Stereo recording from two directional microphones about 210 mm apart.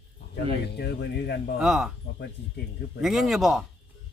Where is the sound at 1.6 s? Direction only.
Centre (ahead or behind).